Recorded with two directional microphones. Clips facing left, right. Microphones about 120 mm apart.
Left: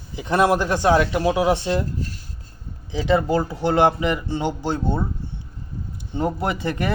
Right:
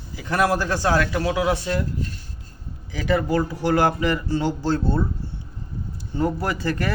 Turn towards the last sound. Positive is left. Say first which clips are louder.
# left 1 dB
turn(degrees=20)  # may be behind; listen again after turning